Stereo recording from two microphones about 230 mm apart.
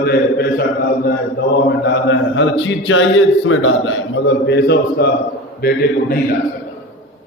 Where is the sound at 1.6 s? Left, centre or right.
Left.